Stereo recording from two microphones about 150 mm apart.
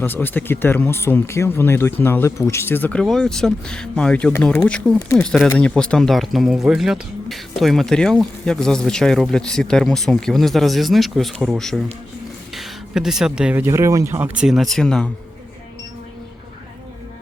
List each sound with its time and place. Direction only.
0.0 s speech: 15° left (ahead or behind)
4.9 s speech: 15° left (ahead or behind)